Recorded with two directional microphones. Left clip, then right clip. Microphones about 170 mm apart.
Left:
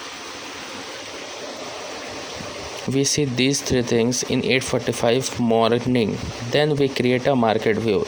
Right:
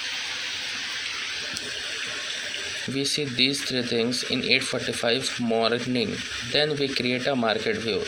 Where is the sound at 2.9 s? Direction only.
55° left (ahead or behind).